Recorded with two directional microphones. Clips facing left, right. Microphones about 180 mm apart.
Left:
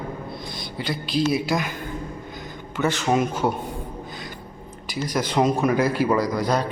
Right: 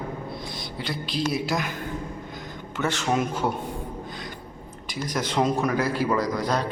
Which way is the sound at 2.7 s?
Centre (ahead or behind).